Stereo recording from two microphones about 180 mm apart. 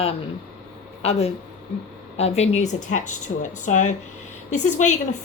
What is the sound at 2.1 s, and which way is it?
A woman's voice, 35° left (ahead or behind).